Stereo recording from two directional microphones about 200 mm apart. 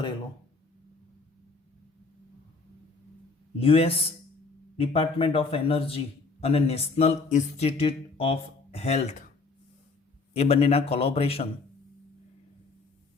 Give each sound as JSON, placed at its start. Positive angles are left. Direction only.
{"t": 3.6, "sound": "a man's voice", "side_deg": 25}
{"t": 10.3, "sound": "a man's voice", "side_deg": 30}